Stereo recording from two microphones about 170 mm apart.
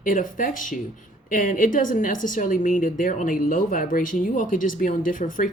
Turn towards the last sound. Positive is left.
turn(degrees=50)  # may be behind; listen again after turning